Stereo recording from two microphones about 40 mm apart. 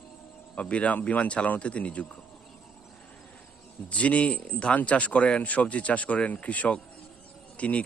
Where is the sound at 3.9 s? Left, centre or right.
Left.